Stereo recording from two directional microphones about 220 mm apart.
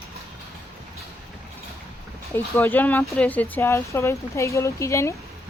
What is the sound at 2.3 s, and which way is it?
Speech, 10° left (ahead or behind).